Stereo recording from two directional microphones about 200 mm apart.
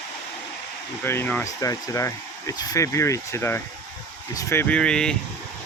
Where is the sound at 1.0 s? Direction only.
10° left (ahead or behind).